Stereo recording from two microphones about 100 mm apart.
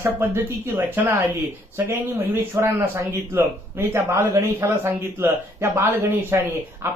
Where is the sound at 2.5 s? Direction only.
25° right (ahead or behind).